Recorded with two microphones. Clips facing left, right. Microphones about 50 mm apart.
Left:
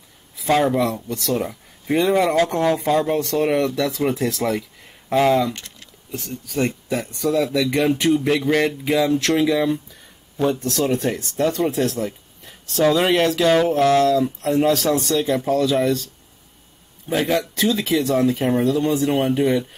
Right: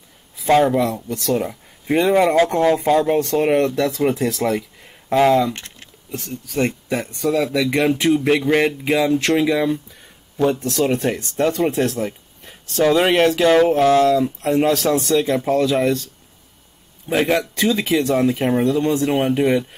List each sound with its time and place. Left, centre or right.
0.5 s speech: centre; by 3.8 s right
3.9 s speech: centre
5.5 s a sound: right
6.1 s speech: centre
6.6 s speech: centre
12.4 s a sound: centre
13.0 s speech: centre
15.3 s speech: centre
15.6 s speech: centre
17.1 s speech: right
17.6 s speech: centre
19.1 s speech: centre